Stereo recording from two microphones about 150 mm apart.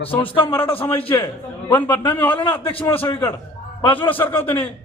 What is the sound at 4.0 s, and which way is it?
Speech, 10° left (ahead or behind).